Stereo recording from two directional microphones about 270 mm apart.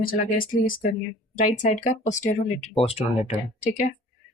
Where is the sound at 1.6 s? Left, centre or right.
Left.